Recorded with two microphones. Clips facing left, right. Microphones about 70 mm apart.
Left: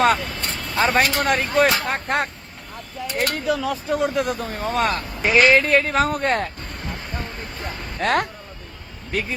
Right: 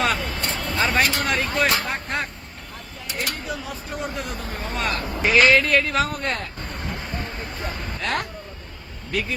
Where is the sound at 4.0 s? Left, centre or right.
Left.